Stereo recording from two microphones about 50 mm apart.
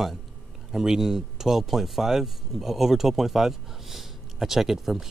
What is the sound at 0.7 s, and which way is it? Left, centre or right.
Speech, centre.